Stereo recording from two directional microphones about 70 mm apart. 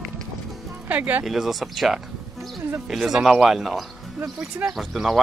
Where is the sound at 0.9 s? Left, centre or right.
Right.